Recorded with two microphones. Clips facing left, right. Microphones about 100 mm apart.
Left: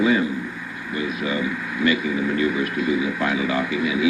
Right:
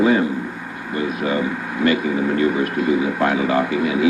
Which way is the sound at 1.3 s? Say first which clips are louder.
Right 3 dB; 50° right (ahead or behind).